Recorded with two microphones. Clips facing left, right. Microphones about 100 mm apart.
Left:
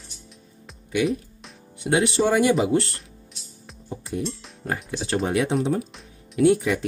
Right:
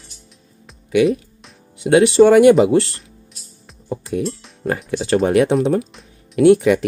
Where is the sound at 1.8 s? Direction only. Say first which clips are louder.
Right 10 dB; 90° right.